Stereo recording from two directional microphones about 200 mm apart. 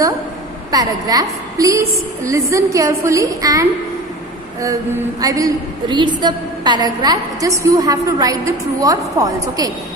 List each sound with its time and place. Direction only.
0.7 s a woman's voice: 20° right (ahead or behind)
5.2 s a woman's voice: 15° right (ahead or behind)